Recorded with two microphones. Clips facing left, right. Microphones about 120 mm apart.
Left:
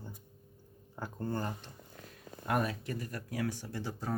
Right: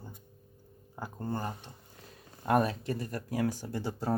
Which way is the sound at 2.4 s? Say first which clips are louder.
Right 5 dB; 30° right (ahead or behind).